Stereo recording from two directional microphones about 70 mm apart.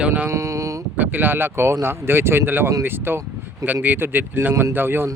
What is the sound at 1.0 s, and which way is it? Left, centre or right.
Speech, right.